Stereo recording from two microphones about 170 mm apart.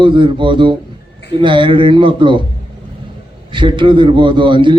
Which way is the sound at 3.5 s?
30° right (ahead or behind).